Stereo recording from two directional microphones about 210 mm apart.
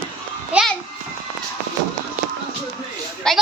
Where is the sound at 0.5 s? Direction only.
5° right (ahead or behind).